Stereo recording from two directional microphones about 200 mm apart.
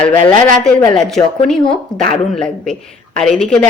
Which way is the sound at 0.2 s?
25° left (ahead or behind).